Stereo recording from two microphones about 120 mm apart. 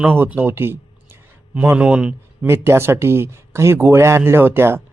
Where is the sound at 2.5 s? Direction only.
20° right (ahead or behind).